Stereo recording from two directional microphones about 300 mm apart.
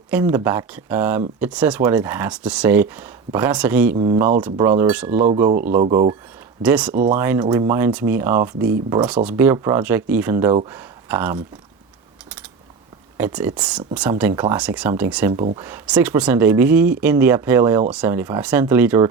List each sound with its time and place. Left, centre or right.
0.1 s speech: centre
3.9 s speech: centre
5.1 s speech: right
6.6 s speech: centre
6.9 s speech: right
7.2 s speech: centre
13.1 s speech: centre